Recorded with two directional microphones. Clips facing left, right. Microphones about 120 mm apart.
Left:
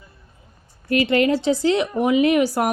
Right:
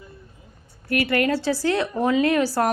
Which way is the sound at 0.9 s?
20° left (ahead or behind).